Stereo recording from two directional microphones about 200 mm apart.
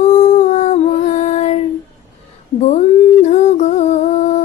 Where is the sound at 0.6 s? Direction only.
35° left (ahead or behind).